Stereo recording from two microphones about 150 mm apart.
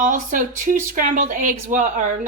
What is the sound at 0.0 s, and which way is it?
Speech, 60° right (ahead or behind).